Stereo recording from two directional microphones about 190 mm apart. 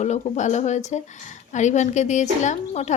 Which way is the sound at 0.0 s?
35° left (ahead or behind).